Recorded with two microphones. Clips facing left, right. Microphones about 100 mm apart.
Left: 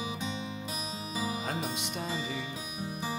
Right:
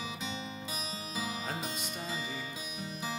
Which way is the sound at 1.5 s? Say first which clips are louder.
Left 3 dB; 60° left (ahead or behind).